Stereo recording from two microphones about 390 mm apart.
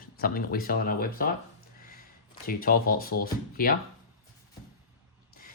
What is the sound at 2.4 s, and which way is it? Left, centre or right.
Speech, left.